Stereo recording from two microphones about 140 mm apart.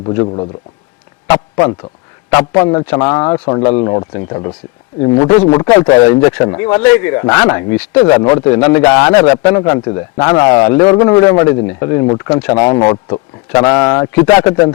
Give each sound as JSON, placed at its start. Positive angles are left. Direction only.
{"t": 1.3, "sound": "a man's voice", "side_deg": 10}
{"t": 2.3, "sound": "a man's voice", "side_deg": 20}
{"t": 8.1, "sound": "a man's voice", "side_deg": 25}
{"t": 12.6, "sound": "a man's voice", "side_deg": 35}